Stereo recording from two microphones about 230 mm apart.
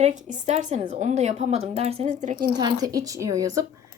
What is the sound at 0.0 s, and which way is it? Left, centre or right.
A woman's voice, right.